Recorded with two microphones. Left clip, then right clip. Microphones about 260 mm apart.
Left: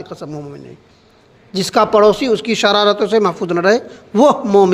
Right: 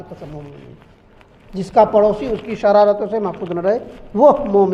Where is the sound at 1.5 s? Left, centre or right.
Left.